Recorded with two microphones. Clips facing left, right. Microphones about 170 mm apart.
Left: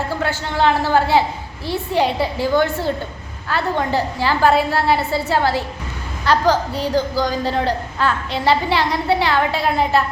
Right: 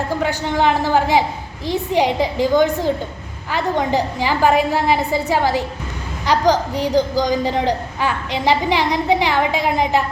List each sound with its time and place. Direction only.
0.1 s a woman's voice: 15° right (ahead or behind)